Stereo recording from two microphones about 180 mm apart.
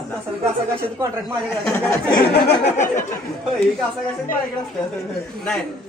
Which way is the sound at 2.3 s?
65° left (ahead or behind).